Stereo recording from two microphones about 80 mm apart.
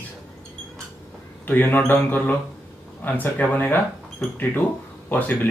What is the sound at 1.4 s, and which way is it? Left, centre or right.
Speech, left.